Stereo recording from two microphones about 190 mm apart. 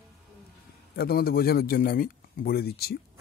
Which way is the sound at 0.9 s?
50° left (ahead or behind).